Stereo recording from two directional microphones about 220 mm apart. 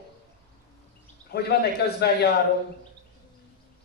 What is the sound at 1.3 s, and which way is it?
Speech, 45° left (ahead or behind).